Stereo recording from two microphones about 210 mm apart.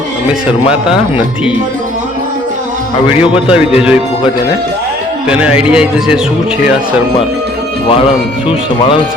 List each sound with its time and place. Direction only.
3.4 s speech: 5° right (ahead or behind)
5.3 s speech: 5° right (ahead or behind)